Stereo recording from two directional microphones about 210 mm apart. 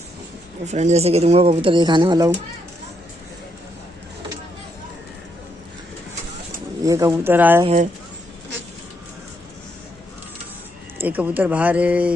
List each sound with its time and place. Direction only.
0.7 s speech: 35° right (ahead or behind)
6.8 s speech: 15° right (ahead or behind)
7.6 s speech: 35° right (ahead or behind)
11.0 s speech: 10° right (ahead or behind)